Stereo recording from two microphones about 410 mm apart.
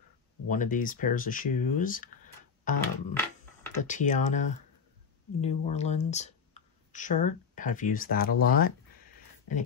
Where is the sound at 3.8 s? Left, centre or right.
Centre.